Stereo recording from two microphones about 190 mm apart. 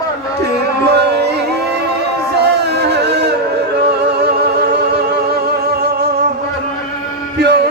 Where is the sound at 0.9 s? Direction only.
60° right (ahead or behind).